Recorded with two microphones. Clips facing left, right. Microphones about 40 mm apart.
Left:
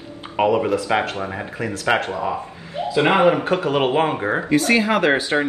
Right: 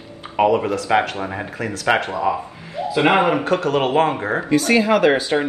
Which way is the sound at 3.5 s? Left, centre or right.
Centre.